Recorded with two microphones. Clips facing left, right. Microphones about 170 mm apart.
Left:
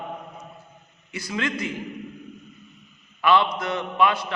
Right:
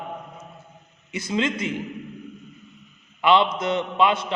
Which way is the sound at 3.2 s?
20° right (ahead or behind).